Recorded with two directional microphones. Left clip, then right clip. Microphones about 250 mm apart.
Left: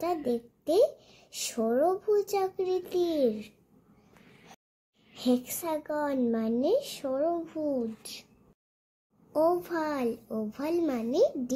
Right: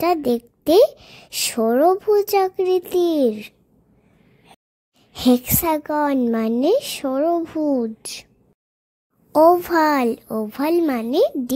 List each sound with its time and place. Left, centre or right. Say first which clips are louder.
0.0 s a child's voice: right 11 dB; right
5.1 s a child's voice: right 11 dB; right
9.3 s a child's voice: right 13 dB; right